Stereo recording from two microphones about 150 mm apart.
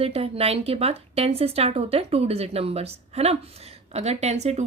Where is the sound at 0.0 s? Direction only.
40° right (ahead or behind).